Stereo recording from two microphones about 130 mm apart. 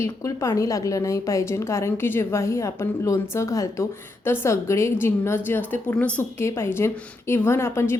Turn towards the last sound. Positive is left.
turn(degrees=20)  # may be behind; listen again after turning